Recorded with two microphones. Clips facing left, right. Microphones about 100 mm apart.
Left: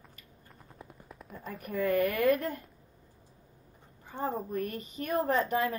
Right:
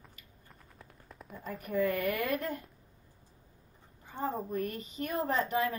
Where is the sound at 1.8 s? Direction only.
40° left (ahead or behind).